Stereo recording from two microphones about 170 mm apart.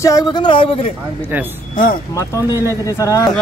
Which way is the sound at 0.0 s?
20° left (ahead or behind).